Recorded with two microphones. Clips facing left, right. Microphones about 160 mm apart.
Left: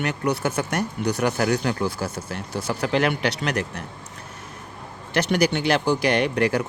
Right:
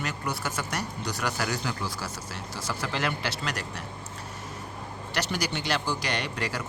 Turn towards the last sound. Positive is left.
turn(degrees=55)  # may be behind; listen again after turning